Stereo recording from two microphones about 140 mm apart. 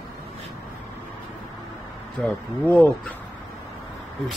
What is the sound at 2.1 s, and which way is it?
Speech, 5° left (ahead or behind).